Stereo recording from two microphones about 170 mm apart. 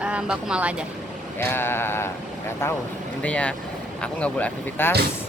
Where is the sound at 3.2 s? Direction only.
5° left (ahead or behind).